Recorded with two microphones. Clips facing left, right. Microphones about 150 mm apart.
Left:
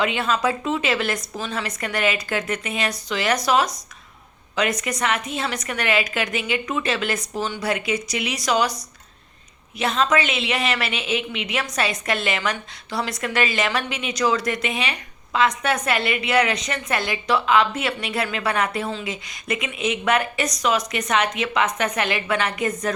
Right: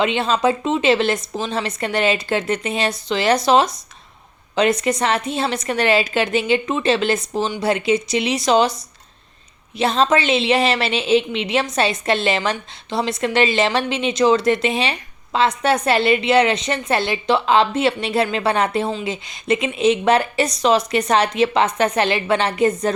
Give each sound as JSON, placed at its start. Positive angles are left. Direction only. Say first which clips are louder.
{"t": 0.0, "sound": "a woman's voice", "louder": "right 4 dB", "side_deg": -25}